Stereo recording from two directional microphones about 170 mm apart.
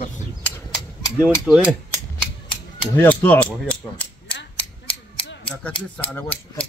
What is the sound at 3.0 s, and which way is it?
Mechanisms, 10° left (ahead or behind).